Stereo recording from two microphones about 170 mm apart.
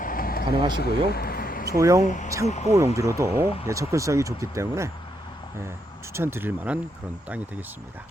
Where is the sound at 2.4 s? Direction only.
40° left (ahead or behind).